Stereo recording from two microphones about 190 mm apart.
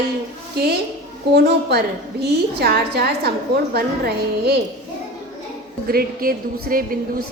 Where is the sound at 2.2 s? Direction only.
60° right (ahead or behind).